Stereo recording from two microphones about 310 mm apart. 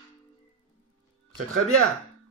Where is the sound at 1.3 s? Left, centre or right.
Right.